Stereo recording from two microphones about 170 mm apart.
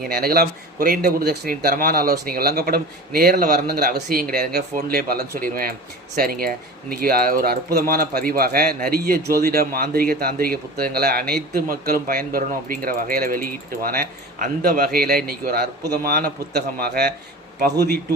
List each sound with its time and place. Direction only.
0.1 s speech: 65° right (ahead or behind)